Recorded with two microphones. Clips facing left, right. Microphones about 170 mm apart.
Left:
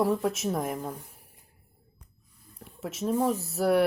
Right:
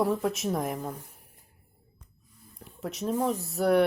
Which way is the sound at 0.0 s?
Centre (ahead or behind).